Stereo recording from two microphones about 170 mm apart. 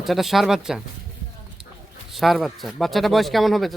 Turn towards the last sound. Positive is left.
turn(degrees=0)  # may be behind; listen again after turning